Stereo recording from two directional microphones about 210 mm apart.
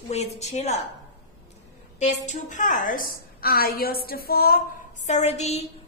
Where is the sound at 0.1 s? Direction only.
30° left (ahead or behind).